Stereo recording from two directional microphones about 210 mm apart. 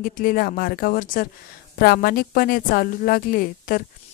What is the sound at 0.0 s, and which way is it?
A woman's voice, 40° left (ahead or behind).